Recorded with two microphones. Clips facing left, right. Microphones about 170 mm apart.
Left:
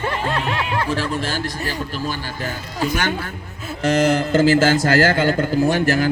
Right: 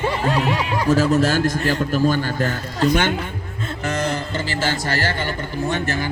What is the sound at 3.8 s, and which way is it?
Speech, 90° left.